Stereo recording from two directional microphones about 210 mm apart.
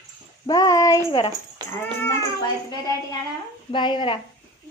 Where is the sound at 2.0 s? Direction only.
15° left (ahead or behind).